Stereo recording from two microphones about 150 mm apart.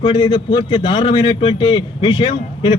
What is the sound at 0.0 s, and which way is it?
A man's voice, 35° left (ahead or behind).